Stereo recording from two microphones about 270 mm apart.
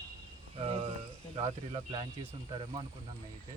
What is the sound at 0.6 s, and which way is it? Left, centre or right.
Speech, right.